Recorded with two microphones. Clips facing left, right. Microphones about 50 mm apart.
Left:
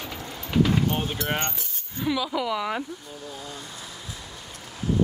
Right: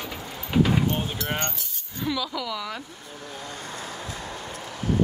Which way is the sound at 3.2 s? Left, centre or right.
Right.